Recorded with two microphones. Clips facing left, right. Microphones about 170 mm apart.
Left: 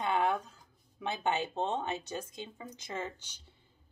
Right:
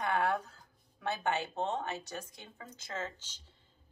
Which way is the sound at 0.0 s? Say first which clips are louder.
Left 1 dB; 20° left (ahead or behind).